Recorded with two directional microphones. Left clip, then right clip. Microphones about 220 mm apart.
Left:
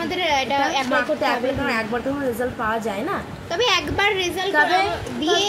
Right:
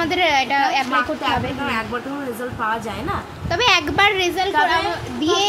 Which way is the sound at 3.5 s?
30° right (ahead or behind).